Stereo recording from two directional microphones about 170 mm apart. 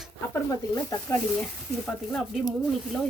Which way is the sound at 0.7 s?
20° left (ahead or behind).